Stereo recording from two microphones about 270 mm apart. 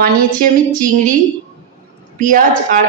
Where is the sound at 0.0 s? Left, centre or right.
Right.